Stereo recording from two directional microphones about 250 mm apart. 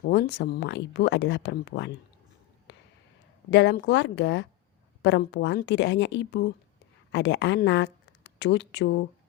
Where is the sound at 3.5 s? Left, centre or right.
Left.